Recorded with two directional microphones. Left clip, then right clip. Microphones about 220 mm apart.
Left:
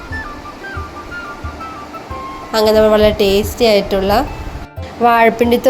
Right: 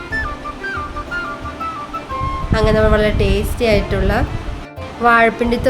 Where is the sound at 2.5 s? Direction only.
10° left (ahead or behind).